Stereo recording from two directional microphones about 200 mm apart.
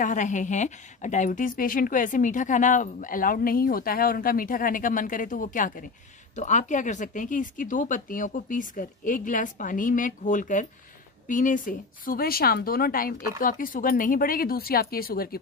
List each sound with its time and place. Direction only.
0.0 s a woman's voice: 40° left (ahead or behind)